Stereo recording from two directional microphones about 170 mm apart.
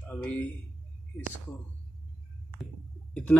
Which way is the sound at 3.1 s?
10° left (ahead or behind).